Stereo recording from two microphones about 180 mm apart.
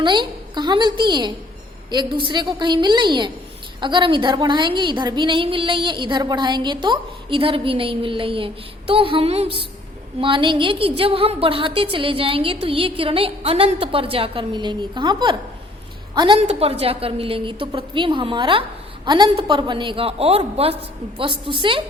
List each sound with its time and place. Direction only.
0.0 s a woman's voice: 25° right (ahead or behind)